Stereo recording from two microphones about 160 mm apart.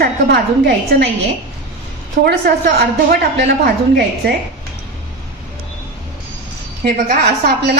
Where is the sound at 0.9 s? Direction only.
90° right.